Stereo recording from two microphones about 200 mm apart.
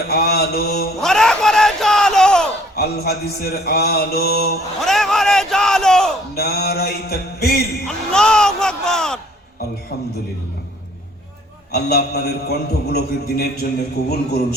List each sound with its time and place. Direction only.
0.1 s mantra: 55° left (ahead or behind)
1.0 s a sound: 5° left (ahead or behind)
2.7 s a man's voice: 50° left (ahead or behind)
4.8 s speech: centre (ahead or behind)
6.3 s a man's voice: 50° left (ahead or behind)
7.9 s speech: 5° left (ahead or behind)
9.9 s a man's voice: 50° left (ahead or behind)
11.7 s a man's voice: 50° left (ahead or behind)